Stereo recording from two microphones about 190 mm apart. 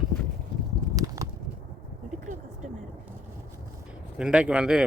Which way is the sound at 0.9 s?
15° right (ahead or behind).